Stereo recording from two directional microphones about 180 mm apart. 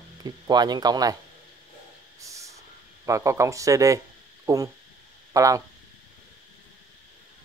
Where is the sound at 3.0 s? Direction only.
15° right (ahead or behind).